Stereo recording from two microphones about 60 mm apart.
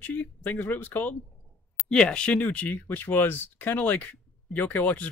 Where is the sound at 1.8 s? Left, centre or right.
Centre.